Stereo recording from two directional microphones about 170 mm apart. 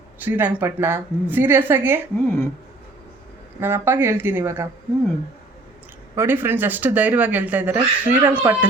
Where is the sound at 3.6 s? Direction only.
15° right (ahead or behind).